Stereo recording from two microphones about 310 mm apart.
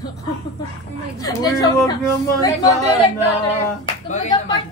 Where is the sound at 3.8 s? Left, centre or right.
Centre.